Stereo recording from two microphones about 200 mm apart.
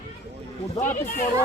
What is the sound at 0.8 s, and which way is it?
Speech, 40° left (ahead or behind).